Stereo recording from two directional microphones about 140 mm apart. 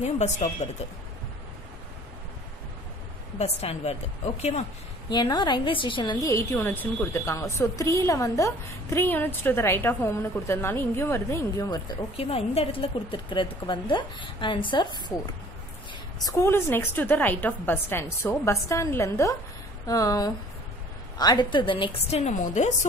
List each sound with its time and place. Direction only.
0.0 s speech: 55° left (ahead or behind)
3.3 s speech: 50° left (ahead or behind)
5.1 s a woman's voice: 30° left (ahead or behind)
6.2 s a woman's voice: 15° left (ahead or behind)
12.2 s a woman's voice: 45° left (ahead or behind)
16.3 s a woman's voice: 20° left (ahead or behind); by 22.7 s 60° left (ahead or behind)